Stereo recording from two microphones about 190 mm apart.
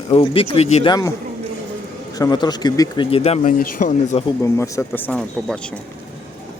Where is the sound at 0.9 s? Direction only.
15° left (ahead or behind).